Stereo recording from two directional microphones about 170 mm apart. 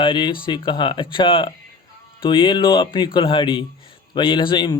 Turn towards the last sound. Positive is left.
turn(degrees=25)  # may be behind; listen again after turning